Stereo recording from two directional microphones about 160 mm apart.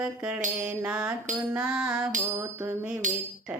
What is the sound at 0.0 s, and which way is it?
Mantra, 5° right (ahead or behind).